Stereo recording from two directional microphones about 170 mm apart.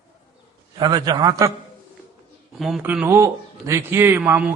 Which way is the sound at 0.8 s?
25° right (ahead or behind).